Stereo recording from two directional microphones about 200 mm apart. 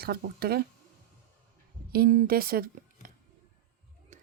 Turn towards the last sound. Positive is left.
turn(degrees=-45)  # may be behind; listen again after turning